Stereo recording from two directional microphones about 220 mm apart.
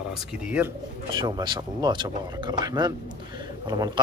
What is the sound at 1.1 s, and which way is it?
Speech, 20° right (ahead or behind).